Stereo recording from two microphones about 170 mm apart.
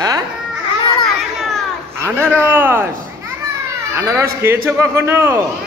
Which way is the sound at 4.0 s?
15° right (ahead or behind).